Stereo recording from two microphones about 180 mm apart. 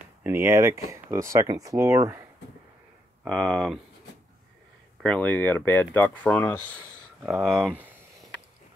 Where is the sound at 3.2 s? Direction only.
Centre (ahead or behind).